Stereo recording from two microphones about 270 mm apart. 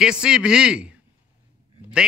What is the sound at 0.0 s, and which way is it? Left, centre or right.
A woman's voice, centre.